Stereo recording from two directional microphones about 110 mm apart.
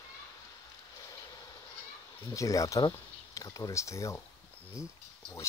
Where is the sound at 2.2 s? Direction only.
30° left (ahead or behind).